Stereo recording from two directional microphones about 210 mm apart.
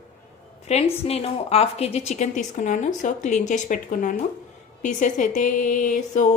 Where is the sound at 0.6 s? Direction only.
30° left (ahead or behind).